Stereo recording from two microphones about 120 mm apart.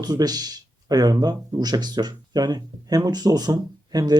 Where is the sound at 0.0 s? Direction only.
35° right (ahead or behind).